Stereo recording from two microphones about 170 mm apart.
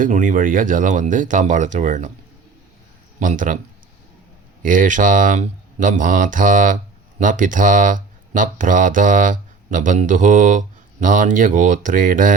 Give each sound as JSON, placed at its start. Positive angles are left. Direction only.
{"t": 0.0, "sound": "speech", "side_deg": -50}
{"t": 3.2, "sound": "speech", "side_deg": -50}
{"t": 4.6, "sound": "speech", "side_deg": -50}